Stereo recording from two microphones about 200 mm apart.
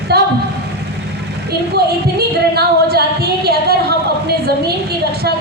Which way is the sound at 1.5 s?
55° right (ahead or behind).